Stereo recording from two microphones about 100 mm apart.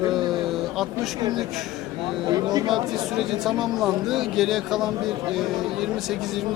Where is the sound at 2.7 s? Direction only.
Centre (ahead or behind).